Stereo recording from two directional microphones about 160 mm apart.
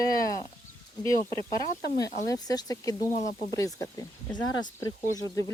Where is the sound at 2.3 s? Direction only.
25° left (ahead or behind).